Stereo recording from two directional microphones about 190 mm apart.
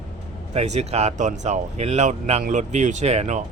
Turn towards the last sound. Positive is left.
turn(degrees=-35)  # may be behind; listen again after turning